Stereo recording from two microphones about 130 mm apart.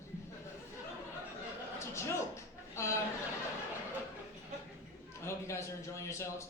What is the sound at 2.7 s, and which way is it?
Speech, 20° left (ahead or behind).